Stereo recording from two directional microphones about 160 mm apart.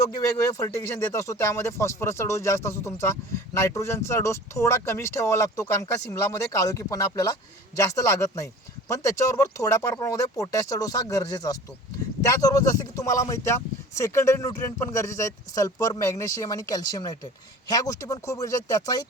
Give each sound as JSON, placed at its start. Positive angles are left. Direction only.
{"t": 0.0, "sound": "speech", "side_deg": 20}